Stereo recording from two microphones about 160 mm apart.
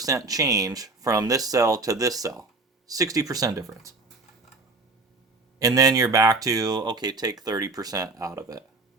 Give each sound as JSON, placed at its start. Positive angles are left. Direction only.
{"t": 0.0, "sound": "speech", "side_deg": -20}
{"t": 5.5, "sound": "speech", "side_deg": -20}